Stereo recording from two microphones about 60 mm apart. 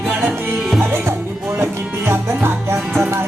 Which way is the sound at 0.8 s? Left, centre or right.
Right.